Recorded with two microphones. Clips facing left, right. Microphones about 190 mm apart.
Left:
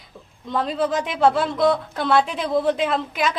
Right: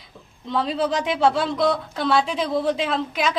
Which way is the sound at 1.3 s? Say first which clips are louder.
Left 1 dB; 50° left (ahead or behind).